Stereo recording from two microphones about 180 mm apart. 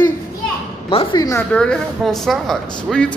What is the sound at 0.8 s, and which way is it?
Speech, 25° left (ahead or behind).